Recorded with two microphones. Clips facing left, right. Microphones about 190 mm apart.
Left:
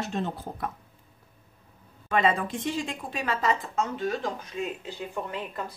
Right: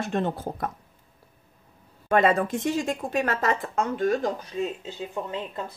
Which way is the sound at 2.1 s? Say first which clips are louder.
Right 4 dB; 45° right (ahead or behind).